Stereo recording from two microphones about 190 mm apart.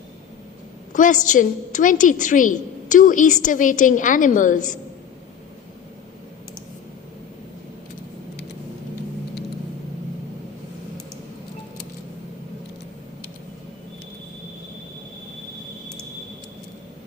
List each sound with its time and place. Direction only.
0.9 s a woman's voice: 40° left (ahead or behind)